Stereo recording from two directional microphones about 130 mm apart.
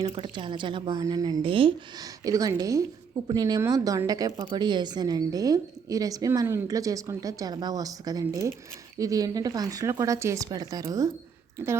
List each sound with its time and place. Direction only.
0.0 s speech: 35° right (ahead or behind)
1.5 s speech: 40° right (ahead or behind)
2.0 s a woman's voice: 25° right (ahead or behind)